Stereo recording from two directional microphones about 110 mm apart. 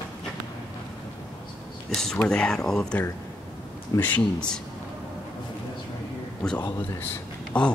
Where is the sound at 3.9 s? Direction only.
30° left (ahead or behind).